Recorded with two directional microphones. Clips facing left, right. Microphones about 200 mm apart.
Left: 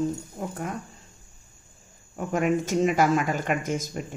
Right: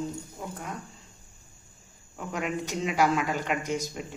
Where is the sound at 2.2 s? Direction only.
50° left (ahead or behind).